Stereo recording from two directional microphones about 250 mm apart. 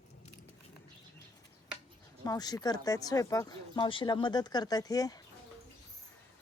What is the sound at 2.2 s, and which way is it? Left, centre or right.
Speech, centre.